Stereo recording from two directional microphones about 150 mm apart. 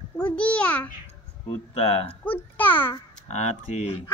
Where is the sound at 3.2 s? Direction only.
50° left (ahead or behind).